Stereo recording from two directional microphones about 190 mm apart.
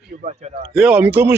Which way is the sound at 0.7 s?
5° right (ahead or behind).